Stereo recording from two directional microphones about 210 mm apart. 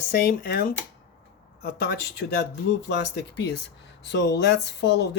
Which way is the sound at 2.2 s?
55° left (ahead or behind).